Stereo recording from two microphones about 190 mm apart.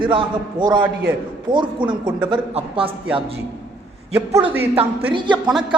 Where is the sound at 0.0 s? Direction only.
25° right (ahead or behind).